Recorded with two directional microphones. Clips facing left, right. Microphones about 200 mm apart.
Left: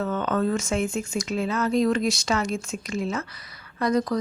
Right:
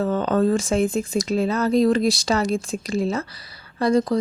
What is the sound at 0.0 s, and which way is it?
Speech, 35° right (ahead or behind).